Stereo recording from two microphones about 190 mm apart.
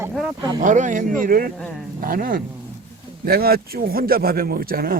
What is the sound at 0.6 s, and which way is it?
A man's voice, 40° right (ahead or behind).